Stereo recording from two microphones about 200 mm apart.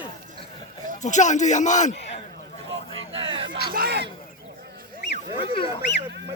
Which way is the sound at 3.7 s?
50° right (ahead or behind).